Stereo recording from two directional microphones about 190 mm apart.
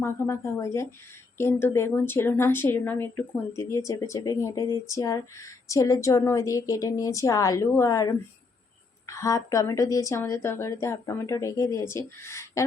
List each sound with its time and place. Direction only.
0.0 s a woman's voice: 15° left (ahead or behind)